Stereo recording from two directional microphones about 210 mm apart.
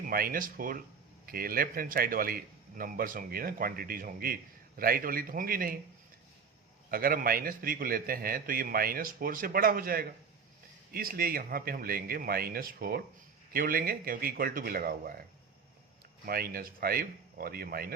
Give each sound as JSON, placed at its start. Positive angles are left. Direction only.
{"t": 0.0, "sound": "a man's voice", "side_deg": -45}
{"t": 6.9, "sound": "a man's voice", "side_deg": -45}
{"t": 16.2, "sound": "a man's voice", "side_deg": -45}